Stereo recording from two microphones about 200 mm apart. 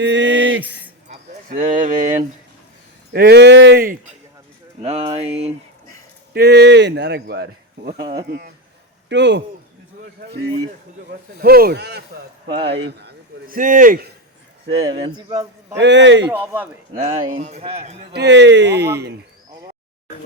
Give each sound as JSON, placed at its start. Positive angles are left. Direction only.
{"t": 0.0, "sound": "a sound", "side_deg": -60}
{"t": 1.5, "sound": "speech", "side_deg": -40}
{"t": 3.1, "sound": "speech", "side_deg": -55}
{"t": 4.8, "sound": "speech", "side_deg": -30}
{"t": 6.3, "sound": "speech", "side_deg": -55}
{"t": 8.0, "sound": "a man's voice", "side_deg": -20}
{"t": 9.0, "sound": "speech", "side_deg": -60}
{"t": 14.8, "sound": "a man's voice", "side_deg": -25}
{"t": 15.8, "sound": "speech", "side_deg": -60}
{"t": 16.3, "sound": "speech", "side_deg": -10}
{"t": 16.9, "sound": "speech", "side_deg": -40}
{"t": 18.1, "sound": "speech", "side_deg": -60}